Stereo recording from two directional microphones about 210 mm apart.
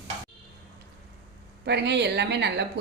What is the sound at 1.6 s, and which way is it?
A woman's voice, 55° right (ahead or behind).